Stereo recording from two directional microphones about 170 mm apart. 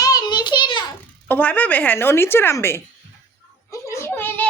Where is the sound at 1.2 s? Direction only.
10° left (ahead or behind).